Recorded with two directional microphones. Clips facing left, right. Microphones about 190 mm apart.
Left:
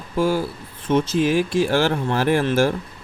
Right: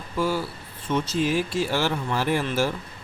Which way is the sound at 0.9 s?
30° left (ahead or behind).